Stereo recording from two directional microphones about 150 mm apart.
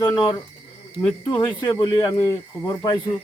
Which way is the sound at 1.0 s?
15° left (ahead or behind).